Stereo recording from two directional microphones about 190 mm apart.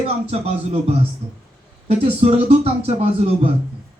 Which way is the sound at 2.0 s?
30° right (ahead or behind).